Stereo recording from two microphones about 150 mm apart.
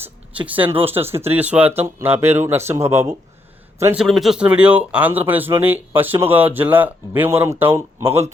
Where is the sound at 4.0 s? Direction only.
Centre (ahead or behind).